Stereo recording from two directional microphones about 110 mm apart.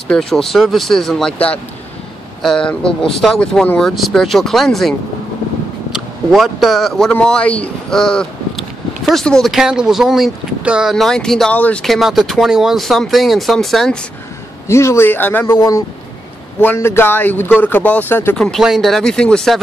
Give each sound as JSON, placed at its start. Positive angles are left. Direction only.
{"t": 0.1, "sound": "speech", "side_deg": 5}
{"t": 11.8, "sound": "speech", "side_deg": 0}
{"t": 14.7, "sound": "speech", "side_deg": 25}
{"t": 15.5, "sound": "speech", "side_deg": 30}
{"t": 18.4, "sound": "speech", "side_deg": 0}